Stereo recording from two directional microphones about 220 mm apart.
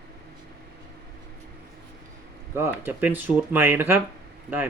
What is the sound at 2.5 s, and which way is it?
Speech, 10° right (ahead or behind).